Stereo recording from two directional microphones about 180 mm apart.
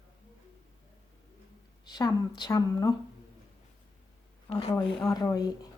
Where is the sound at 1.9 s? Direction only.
20° left (ahead or behind).